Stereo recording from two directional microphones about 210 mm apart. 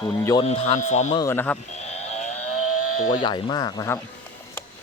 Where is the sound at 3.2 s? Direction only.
20° left (ahead or behind).